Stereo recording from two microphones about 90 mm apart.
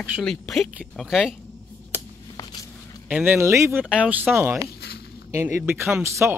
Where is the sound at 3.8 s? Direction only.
15° right (ahead or behind); by 6.4 s 30° right (ahead or behind).